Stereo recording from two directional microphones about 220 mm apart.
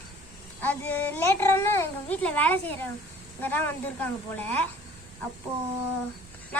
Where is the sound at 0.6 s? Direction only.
10° left (ahead or behind).